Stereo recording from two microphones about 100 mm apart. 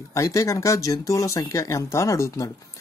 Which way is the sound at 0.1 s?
30° left (ahead or behind).